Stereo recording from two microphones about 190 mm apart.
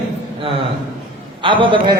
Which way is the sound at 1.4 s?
25° right (ahead or behind).